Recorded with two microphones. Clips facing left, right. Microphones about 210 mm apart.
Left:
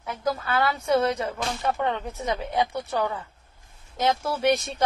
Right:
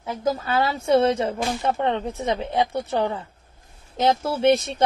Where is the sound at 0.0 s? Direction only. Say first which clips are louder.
Right 3 dB; 25° right (ahead or behind).